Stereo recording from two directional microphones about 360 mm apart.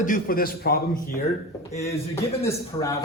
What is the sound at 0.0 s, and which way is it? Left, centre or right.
Speech, left.